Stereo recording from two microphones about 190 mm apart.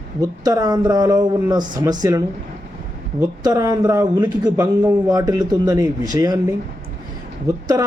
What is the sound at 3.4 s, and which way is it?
A man's voice, 20° right (ahead or behind).